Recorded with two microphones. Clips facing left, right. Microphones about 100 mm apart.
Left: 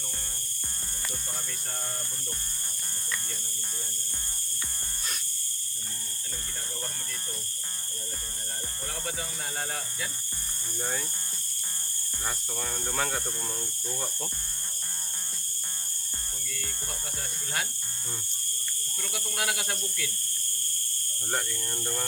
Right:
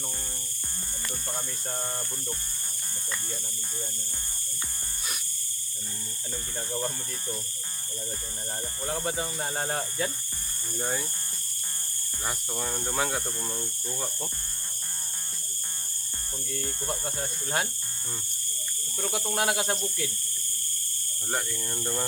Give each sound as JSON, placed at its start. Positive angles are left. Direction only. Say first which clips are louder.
{"t": 8.9, "sound": "speech", "louder": "right 7 dB", "side_deg": -30}
{"t": 10.8, "sound": "speech", "louder": "right 3 dB", "side_deg": -5}
{"t": 12.2, "sound": "speech", "louder": "right 2 dB", "side_deg": -10}
{"t": 17.2, "sound": "speech", "louder": "right 2 dB", "side_deg": -25}
{"t": 19.0, "sound": "speech", "louder": "right 5 dB", "side_deg": -30}
{"t": 21.2, "sound": "speech", "louder": "right 1 dB", "side_deg": -5}